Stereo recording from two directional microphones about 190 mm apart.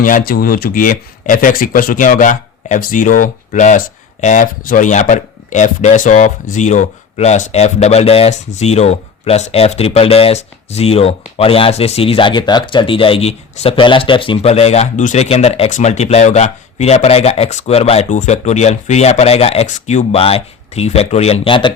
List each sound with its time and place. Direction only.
0.0 s speech: 45° left (ahead or behind); by 21.7 s 25° left (ahead or behind)